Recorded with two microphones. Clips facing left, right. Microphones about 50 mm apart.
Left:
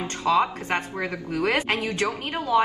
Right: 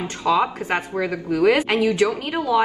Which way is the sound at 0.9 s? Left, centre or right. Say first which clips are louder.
Right 6 dB; centre.